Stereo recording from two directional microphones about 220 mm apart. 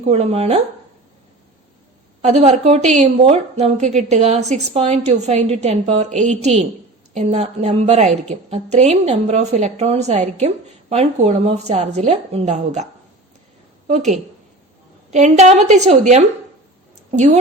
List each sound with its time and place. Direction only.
0.0 s a woman's voice: 30° right (ahead or behind)
2.2 s a woman's voice: 30° right (ahead or behind)